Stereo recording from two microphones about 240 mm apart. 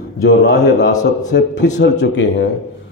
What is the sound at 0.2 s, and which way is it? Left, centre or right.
A man's voice, left.